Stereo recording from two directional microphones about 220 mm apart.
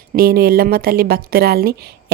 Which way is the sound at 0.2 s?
45° right (ahead or behind).